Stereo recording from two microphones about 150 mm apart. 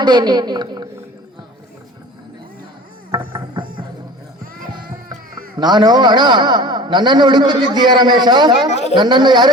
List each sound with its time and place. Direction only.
0.0 s a man's voice: 30° right (ahead or behind)
3.1 s music: 30° right (ahead or behind)
5.5 s a man's voice: 30° right (ahead or behind)